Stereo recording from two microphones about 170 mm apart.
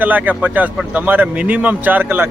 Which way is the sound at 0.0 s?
10° right (ahead or behind).